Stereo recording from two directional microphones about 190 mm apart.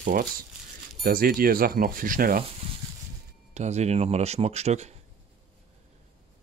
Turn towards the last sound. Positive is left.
turn(degrees=-35)  # may be behind; listen again after turning